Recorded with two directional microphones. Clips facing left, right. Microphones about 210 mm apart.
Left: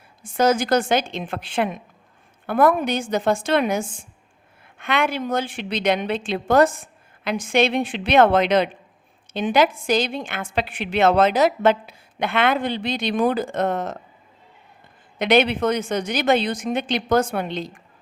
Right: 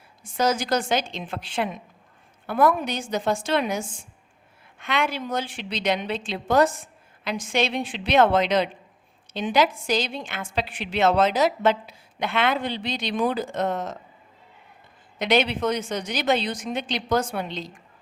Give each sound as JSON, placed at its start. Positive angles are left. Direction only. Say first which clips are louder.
{"t": 0.2, "sound": "a woman's voice", "louder": "left 5 dB", "side_deg": 55}
{"t": 15.2, "sound": "a woman's voice", "louder": "left 4 dB", "side_deg": 55}